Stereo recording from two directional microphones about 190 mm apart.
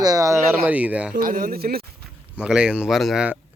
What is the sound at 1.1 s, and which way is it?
Speech, 45° right (ahead or behind).